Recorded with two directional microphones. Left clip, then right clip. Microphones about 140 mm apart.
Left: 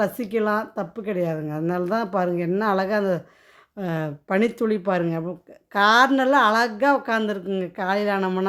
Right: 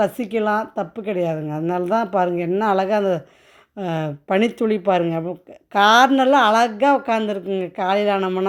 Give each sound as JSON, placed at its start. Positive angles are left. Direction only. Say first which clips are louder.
{"t": 0.0, "sound": "a woman's voice", "louder": "right 3 dB", "side_deg": -10}